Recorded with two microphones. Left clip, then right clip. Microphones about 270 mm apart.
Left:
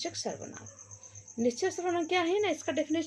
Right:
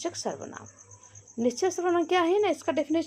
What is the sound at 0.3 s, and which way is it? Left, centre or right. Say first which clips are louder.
Speech: right 4 dB; centre.